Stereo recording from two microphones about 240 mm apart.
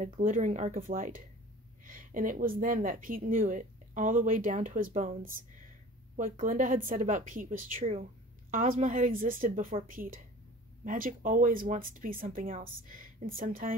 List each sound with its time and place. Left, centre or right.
0.0 s speech: right